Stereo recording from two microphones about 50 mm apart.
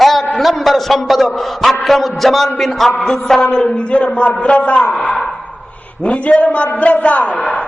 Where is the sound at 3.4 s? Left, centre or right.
Centre.